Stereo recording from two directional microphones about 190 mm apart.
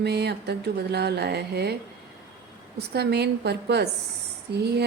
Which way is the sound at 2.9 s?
60° right (ahead or behind).